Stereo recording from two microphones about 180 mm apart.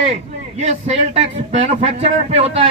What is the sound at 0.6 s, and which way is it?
A man's voice, 40° right (ahead or behind).